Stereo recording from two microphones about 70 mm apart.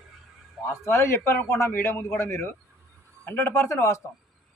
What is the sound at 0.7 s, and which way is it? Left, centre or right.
A man's voice, left.